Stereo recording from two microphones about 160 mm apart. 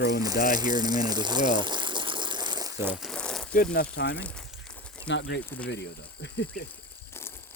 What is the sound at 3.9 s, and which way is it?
Speech, 90° left.